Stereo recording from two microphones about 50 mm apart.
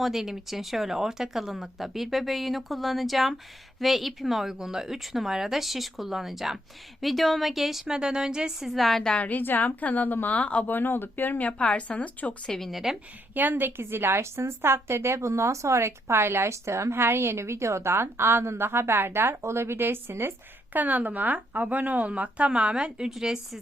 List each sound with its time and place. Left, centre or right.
0.0 s speech: centre
7.9 s a woman's voice: centre
9.2 s a woman's voice: left
10.3 s a woman's voice: left
10.7 s a woman's voice: left
11.4 s a woman's voice: left
12.5 s a woman's voice: centre
12.7 s a woman's voice: centre
13.3 s a woman's voice: right
19.4 s a woman's voice: right
20.7 s speech: right; by 23.0 s centre
23.0 s speech: centre